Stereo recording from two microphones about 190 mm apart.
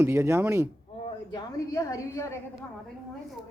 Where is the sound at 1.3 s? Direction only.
20° left (ahead or behind).